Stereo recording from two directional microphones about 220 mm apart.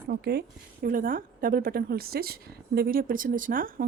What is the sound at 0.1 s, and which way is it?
A woman's voice, 45° right (ahead or behind).